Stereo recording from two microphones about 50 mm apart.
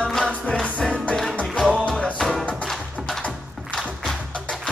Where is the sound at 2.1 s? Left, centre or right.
Centre.